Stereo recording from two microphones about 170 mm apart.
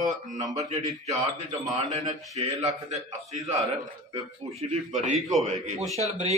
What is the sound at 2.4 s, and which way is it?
A man's voice, 35° right (ahead or behind).